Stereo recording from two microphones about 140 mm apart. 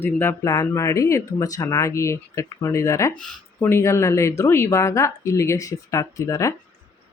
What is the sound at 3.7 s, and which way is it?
Speech, 20° left (ahead or behind).